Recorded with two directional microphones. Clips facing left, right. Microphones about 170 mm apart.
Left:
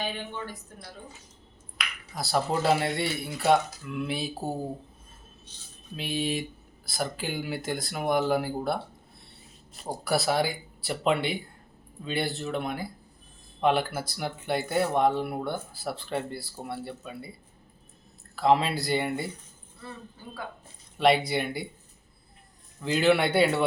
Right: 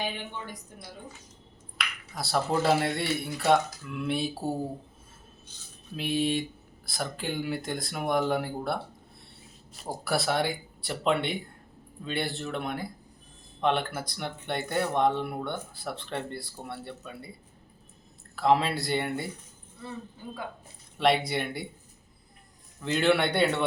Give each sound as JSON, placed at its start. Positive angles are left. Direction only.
{"t": 0.0, "sound": "speech", "side_deg": -15}
{"t": 1.8, "sound": "a sound", "side_deg": 0}
{"t": 2.1, "sound": "speech", "side_deg": 0}
{"t": 6.0, "sound": "speech", "side_deg": 0}
{"t": 10.0, "sound": "speech", "side_deg": 0}
{"t": 18.3, "sound": "speech", "side_deg": 0}
{"t": 21.0, "sound": "speech", "side_deg": 0}
{"t": 22.8, "sound": "speech", "side_deg": 0}